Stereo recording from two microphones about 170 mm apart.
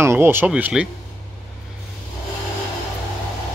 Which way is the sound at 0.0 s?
15° right (ahead or behind).